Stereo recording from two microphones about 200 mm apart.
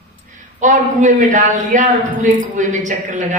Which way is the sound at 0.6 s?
40° right (ahead or behind).